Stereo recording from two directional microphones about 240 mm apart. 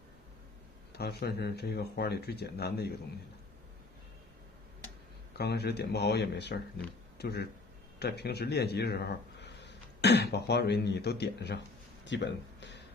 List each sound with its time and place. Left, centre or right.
0.9 s speech: left
5.4 s speech: left
12.0 s a sound: left